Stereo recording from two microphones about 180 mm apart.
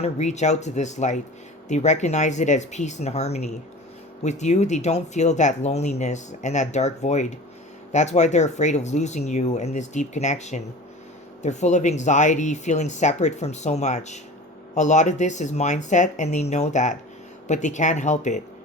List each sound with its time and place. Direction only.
0.0 s speech: 40° left (ahead or behind)